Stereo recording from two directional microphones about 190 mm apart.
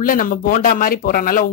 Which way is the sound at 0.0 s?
45° left (ahead or behind).